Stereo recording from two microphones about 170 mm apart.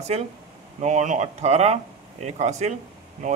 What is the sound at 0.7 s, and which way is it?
Speech, 45° right (ahead or behind).